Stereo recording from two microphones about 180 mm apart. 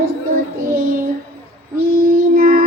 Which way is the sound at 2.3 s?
50° right (ahead or behind).